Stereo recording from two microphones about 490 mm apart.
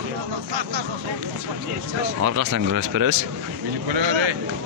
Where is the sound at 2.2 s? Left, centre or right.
Right.